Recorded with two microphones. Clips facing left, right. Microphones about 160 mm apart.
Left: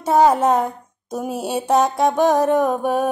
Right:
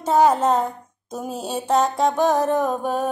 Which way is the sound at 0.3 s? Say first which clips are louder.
Left 2 dB; 10° left (ahead or behind).